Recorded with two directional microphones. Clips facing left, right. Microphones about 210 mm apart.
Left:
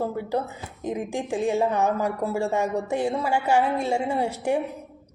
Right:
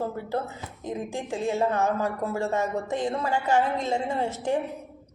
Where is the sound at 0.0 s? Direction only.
15° left (ahead or behind).